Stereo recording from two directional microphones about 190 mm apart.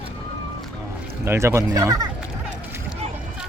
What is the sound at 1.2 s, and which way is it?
Speech, 15° right (ahead or behind).